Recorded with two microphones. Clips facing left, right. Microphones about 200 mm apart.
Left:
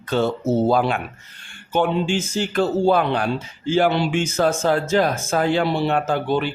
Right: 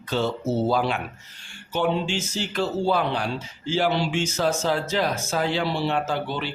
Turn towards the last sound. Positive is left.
turn(degrees=50)  # may be behind; listen again after turning